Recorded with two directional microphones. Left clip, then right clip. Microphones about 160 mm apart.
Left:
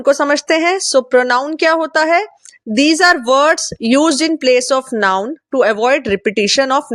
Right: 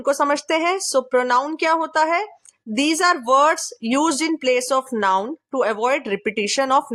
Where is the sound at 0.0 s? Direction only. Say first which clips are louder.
Left 6 dB; 30° left (ahead or behind).